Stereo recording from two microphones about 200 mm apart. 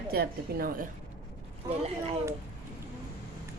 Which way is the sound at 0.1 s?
50° right (ahead or behind).